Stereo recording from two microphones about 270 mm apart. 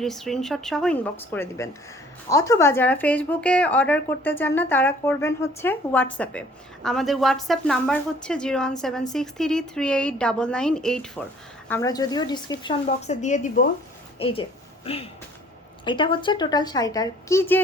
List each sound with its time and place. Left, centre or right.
0.0 s a woman's voice: centre